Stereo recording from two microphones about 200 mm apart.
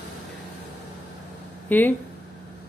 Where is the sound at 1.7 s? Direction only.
10° left (ahead or behind).